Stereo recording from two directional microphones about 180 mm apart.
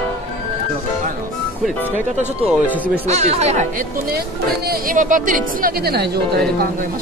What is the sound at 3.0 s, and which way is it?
Speech, 35° right (ahead or behind).